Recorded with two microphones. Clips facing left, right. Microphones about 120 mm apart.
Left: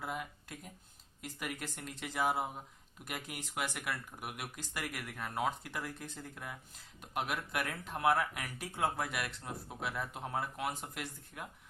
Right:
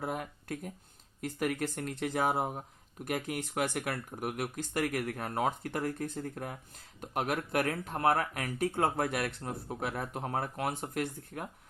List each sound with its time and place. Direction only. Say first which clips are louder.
0.0 s speech: right 5 dB; 50° right (ahead or behind)